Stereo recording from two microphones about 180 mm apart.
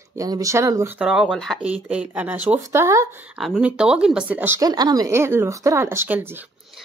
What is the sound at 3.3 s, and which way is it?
Speech, 5° right (ahead or behind).